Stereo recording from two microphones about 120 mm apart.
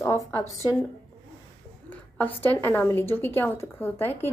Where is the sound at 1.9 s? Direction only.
15° left (ahead or behind).